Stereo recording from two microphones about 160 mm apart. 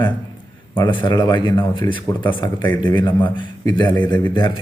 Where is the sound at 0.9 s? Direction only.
30° left (ahead or behind).